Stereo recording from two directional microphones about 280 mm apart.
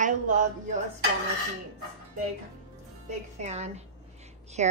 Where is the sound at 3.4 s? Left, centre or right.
Right.